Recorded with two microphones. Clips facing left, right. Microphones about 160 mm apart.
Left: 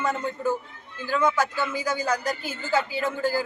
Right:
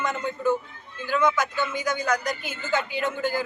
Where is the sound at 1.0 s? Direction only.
35° left (ahead or behind).